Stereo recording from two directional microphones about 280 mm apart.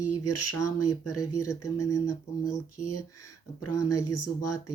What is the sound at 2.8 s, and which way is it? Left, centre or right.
Speech, left.